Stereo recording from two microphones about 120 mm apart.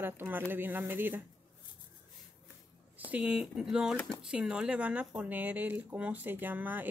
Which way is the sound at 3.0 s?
10° right (ahead or behind).